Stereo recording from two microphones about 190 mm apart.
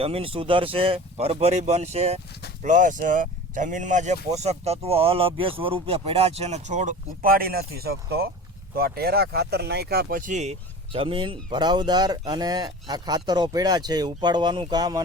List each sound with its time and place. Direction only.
0.0 s speech: 30° right (ahead or behind)